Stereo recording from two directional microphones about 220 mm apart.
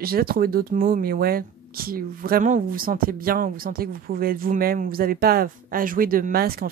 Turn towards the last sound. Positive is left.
turn(degrees=-45)  # may be behind; listen again after turning